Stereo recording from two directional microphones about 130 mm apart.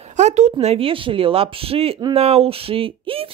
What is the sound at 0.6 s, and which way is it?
Speech, 50° right (ahead or behind).